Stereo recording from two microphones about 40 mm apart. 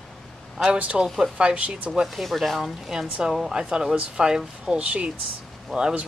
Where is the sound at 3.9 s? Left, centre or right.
Right.